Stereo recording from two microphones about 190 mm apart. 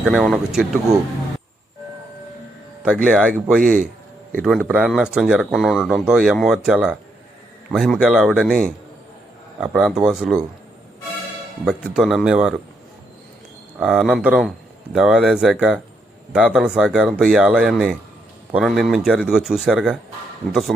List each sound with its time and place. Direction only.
0.0 s speech: centre (ahead or behind)
2.8 s speech: 5° right (ahead or behind)
3.6 s speech: 45° right (ahead or behind)
4.6 s speech: 5° right (ahead or behind)
11.6 s speech: 5° right (ahead or behind)
13.7 s speech: centre (ahead or behind)